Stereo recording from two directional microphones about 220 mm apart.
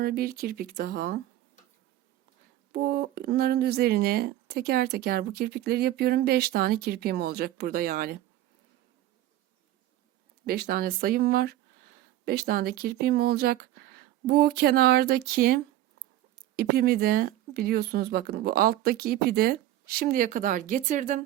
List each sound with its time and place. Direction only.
0.0 s speech: 45° right (ahead or behind)
2.7 s speech: 45° right (ahead or behind)
10.4 s speech: 45° right (ahead or behind)